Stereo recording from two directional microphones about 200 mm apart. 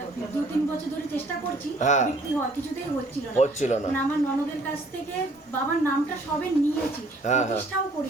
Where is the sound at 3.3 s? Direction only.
35° left (ahead or behind).